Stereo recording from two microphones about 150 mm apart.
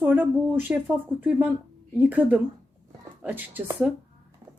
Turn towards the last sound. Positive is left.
turn(degrees=-10)  # may be behind; listen again after turning